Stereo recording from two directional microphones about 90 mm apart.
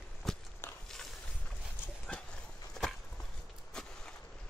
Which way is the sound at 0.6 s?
25° left (ahead or behind).